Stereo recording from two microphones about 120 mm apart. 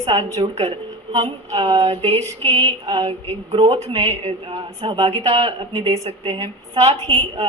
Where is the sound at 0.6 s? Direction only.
60° right (ahead or behind).